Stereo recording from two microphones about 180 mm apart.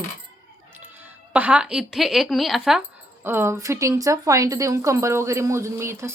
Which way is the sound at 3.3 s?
15° right (ahead or behind).